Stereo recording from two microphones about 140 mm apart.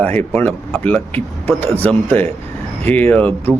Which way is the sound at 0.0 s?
15° left (ahead or behind).